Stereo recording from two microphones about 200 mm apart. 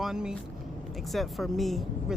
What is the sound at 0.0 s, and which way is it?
Speech, 5° right (ahead or behind).